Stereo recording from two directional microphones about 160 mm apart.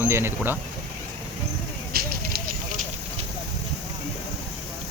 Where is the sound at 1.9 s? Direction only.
70° right (ahead or behind).